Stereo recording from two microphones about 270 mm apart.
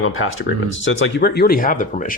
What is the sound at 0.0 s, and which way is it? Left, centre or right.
Speech, left.